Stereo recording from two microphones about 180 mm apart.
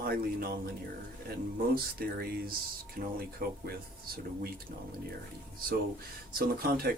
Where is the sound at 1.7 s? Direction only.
55° right (ahead or behind).